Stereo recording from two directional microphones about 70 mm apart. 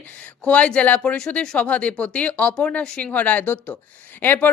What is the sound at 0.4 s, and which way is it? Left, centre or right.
A woman's voice, centre.